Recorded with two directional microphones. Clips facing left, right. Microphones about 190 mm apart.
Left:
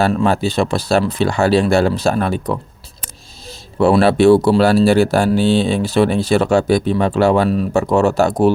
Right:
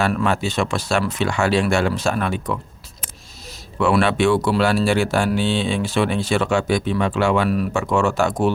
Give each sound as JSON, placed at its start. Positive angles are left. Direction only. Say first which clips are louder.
{"t": 0.0, "sound": "speech", "louder": "left 5 dB", "side_deg": 30}
{"t": 3.8, "sound": "speech", "louder": "left 6 dB", "side_deg": 35}